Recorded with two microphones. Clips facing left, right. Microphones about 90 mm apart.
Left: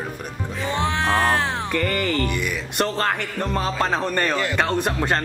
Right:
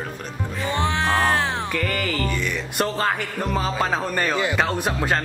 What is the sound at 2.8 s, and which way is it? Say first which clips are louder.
Speech: left 1 dB; 10° right (ahead or behind).